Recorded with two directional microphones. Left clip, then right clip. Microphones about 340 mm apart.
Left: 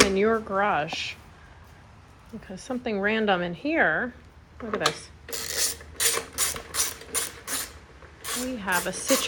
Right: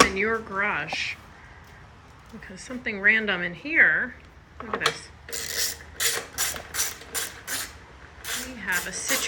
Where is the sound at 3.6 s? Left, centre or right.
Left.